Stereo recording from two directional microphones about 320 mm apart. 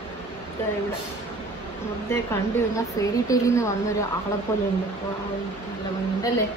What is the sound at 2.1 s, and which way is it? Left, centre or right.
A woman's voice, centre.